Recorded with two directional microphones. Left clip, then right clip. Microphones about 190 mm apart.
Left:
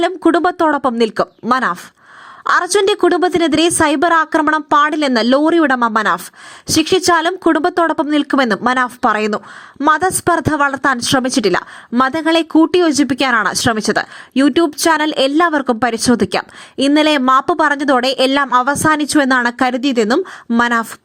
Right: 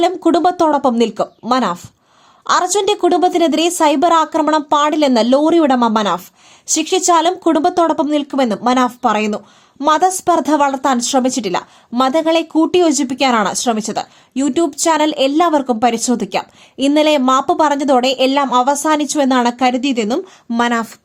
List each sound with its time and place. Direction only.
0.0 s speech: 25° left (ahead or behind)